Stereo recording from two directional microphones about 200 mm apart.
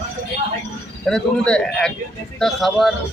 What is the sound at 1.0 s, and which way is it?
A man's voice, 5° left (ahead or behind).